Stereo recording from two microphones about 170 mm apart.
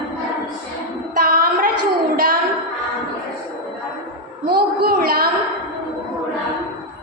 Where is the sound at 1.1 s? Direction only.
60° right (ahead or behind).